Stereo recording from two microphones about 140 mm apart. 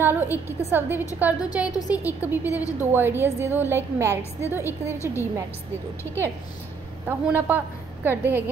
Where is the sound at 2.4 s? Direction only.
25° left (ahead or behind).